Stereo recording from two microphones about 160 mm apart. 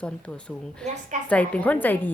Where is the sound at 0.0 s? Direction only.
5° left (ahead or behind).